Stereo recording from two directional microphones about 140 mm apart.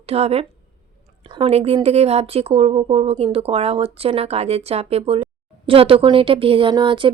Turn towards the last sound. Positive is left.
turn(degrees=-35)  # may be behind; listen again after turning